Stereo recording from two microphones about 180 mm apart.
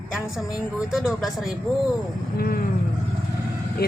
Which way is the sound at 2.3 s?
55° left (ahead or behind).